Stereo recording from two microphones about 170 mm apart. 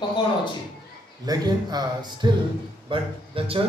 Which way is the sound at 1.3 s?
25° right (ahead or behind).